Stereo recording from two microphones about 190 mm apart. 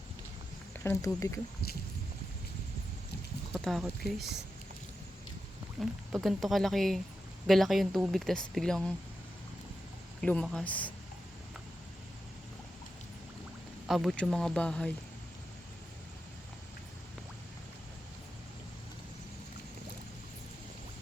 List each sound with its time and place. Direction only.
0.9 s speech: 15° left (ahead or behind)
3.5 s speech: centre (ahead or behind)
6.2 s speech: centre (ahead or behind)
10.2 s speech: 5° left (ahead or behind)
13.8 s speech: centre (ahead or behind)